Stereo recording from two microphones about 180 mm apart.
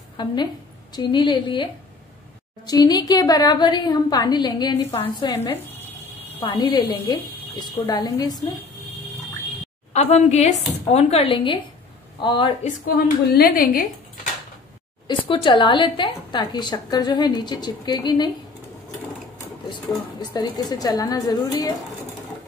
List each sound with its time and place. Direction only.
0.9 s a woman's voice: 25° left (ahead or behind)
9.9 s a woman's voice: 35° left (ahead or behind)
12.6 s a woman's voice: 55° left (ahead or behind)
15.0 s a woman's voice: 30° left (ahead or behind)
19.7 s a woman's voice: 25° left (ahead or behind)